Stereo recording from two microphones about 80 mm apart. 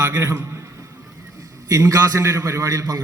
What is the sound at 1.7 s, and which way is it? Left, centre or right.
A man's voice, right.